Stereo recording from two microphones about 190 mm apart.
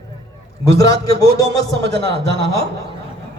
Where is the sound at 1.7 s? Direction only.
65° right (ahead or behind).